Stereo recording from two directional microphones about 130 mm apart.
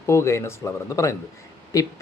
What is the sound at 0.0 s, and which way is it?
Speech, 20° left (ahead or behind).